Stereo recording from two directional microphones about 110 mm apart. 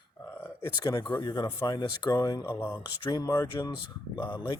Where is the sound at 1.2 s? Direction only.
40° left (ahead or behind).